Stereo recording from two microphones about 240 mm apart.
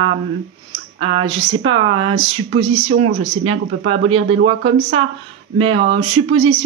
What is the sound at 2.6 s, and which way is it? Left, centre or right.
Speech, right.